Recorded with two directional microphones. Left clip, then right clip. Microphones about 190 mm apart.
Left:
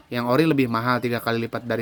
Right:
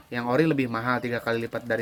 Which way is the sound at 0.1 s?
60° left (ahead or behind).